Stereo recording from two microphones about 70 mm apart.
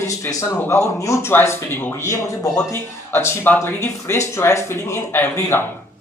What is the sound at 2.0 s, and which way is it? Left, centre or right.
Speech, left.